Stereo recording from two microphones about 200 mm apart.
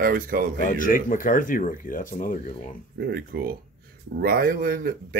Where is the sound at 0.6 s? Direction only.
40° left (ahead or behind).